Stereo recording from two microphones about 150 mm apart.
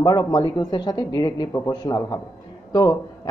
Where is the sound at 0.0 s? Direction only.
25° left (ahead or behind).